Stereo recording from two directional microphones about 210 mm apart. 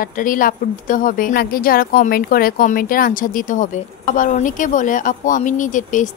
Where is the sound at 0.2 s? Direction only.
40° left (ahead or behind).